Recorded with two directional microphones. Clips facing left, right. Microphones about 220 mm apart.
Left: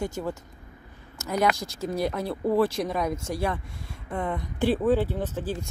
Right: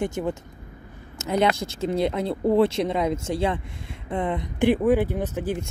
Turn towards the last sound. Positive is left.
turn(degrees=-15)  # may be behind; listen again after turning